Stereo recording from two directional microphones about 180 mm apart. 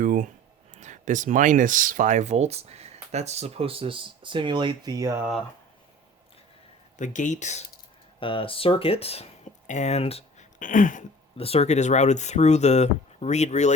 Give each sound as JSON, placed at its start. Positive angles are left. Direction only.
{"t": 0.0, "sound": "speech", "side_deg": -50}
{"t": 7.0, "sound": "speech", "side_deg": 45}
{"t": 8.2, "sound": "speech", "side_deg": 30}
{"t": 10.6, "sound": "speech", "side_deg": 45}
{"t": 11.3, "sound": "speech", "side_deg": 35}